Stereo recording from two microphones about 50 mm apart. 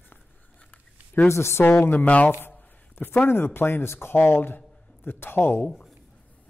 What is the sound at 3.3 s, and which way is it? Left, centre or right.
Speech, left.